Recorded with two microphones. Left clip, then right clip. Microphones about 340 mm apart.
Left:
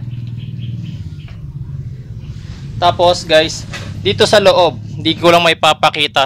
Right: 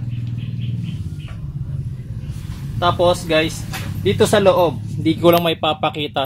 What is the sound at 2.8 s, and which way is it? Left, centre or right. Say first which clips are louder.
Speech: left 5 dB; left.